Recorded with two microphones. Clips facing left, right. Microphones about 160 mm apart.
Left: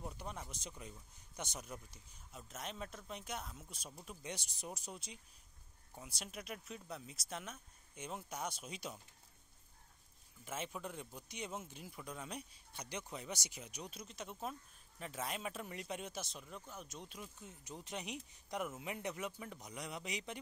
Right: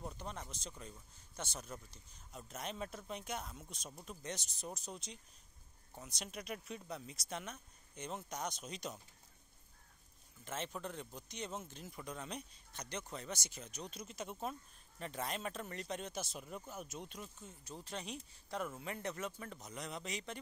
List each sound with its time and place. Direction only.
0.0 s speech: 10° left (ahead or behind)
2.3 s speech: centre (ahead or behind)
10.4 s speech: 5° left (ahead or behind)
13.9 s speech: centre (ahead or behind)
17.5 s speech: 15° left (ahead or behind)